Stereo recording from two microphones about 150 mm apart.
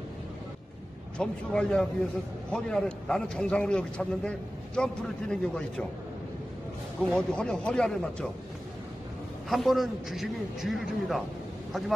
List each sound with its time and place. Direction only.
1.1 s a man's voice: 5° left (ahead or behind)
7.0 s a man's voice: 5° left (ahead or behind)
9.5 s a man's voice: centre (ahead or behind)